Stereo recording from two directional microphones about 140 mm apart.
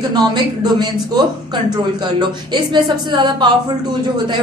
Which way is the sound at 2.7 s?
30° right (ahead or behind).